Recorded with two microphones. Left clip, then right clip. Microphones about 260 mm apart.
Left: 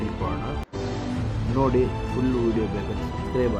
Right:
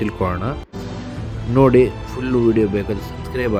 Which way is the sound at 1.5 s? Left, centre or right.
Right.